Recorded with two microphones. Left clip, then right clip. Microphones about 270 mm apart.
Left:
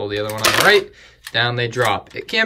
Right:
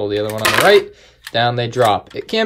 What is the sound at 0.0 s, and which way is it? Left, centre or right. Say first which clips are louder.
Speech: right 2 dB; centre.